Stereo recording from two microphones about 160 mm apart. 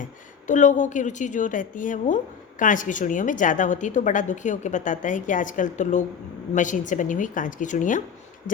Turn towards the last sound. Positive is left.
turn(degrees=55)  # may be behind; listen again after turning